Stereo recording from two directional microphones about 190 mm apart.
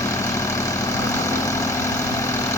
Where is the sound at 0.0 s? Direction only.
15° left (ahead or behind).